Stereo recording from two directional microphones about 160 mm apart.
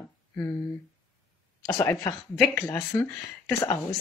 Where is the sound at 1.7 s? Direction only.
20° left (ahead or behind).